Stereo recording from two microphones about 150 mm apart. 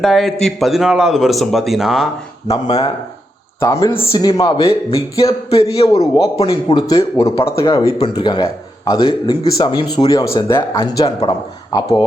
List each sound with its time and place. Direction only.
0.0 s a man's voice: centre (ahead or behind)
2.6 s a man's voice: 25° left (ahead or behind)
3.8 s speech: 40° left (ahead or behind)
4.4 s a man's voice: 25° left (ahead or behind)
4.6 s speech: 40° left (ahead or behind)
6.7 s a man's voice: 25° left (ahead or behind)